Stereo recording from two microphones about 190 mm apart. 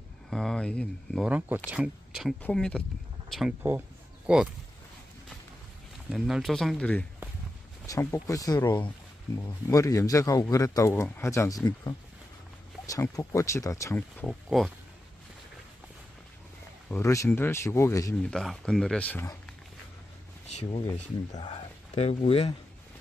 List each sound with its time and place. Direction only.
0.3 s speech: 5° left (ahead or behind)
6.0 s speech: centre (ahead or behind)
16.9 s speech: 15° left (ahead or behind)
18.3 s speech: centre (ahead or behind)
20.4 s speech: 35° left (ahead or behind)